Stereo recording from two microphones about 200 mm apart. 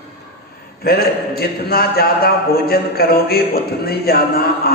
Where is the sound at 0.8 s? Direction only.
50° left (ahead or behind).